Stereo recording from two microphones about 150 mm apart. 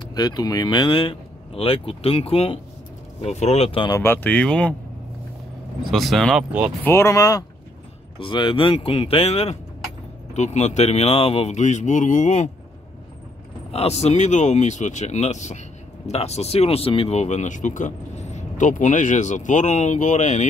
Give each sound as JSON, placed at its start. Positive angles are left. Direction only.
{"t": 0.1, "sound": "speech", "side_deg": 25}
{"t": 4.0, "sound": "speech", "side_deg": 15}
{"t": 5.9, "sound": "speech", "side_deg": 0}
{"t": 6.8, "sound": "speech", "side_deg": 15}
{"t": 8.2, "sound": "speech", "side_deg": 35}
{"t": 13.7, "sound": "speech", "side_deg": 45}